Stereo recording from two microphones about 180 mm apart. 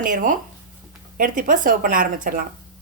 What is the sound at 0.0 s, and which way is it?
Speech, 50° right (ahead or behind).